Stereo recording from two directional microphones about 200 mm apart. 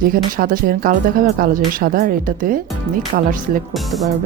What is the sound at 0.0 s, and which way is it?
Speech, 45° right (ahead or behind).